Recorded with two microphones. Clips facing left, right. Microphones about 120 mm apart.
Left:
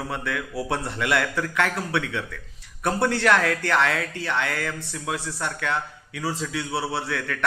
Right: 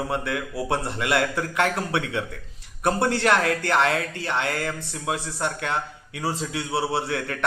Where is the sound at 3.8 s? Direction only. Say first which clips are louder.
Right 1 dB; 40° right (ahead or behind).